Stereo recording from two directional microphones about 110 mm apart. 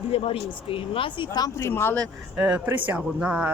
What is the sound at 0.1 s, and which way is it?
Speech, 60° left (ahead or behind).